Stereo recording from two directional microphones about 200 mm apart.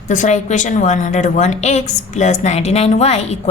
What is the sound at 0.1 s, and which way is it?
A woman's voice, 40° left (ahead or behind).